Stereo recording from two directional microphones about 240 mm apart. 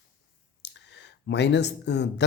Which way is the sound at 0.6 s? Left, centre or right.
Left.